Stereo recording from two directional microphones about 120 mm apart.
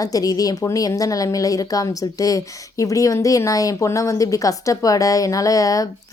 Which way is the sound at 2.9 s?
30° left (ahead or behind).